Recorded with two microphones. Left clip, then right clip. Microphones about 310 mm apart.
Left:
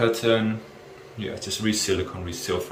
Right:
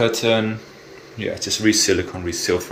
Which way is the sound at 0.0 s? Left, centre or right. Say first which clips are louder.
Right 3 dB; centre.